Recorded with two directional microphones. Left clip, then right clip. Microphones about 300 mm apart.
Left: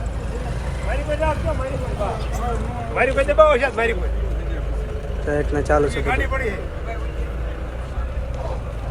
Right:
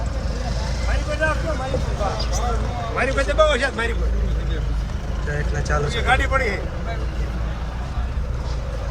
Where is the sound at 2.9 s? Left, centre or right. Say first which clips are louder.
Left 4 dB; left.